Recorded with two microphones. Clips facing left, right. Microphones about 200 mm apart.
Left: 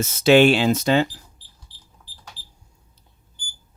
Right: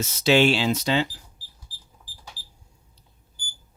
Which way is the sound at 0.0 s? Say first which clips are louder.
Left 5 dB; 50° left (ahead or behind).